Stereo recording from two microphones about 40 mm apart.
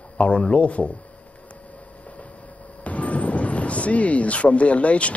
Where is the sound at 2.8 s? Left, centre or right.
Left.